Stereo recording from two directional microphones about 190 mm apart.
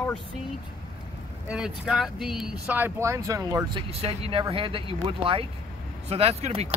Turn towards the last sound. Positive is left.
turn(degrees=-35)  # may be behind; listen again after turning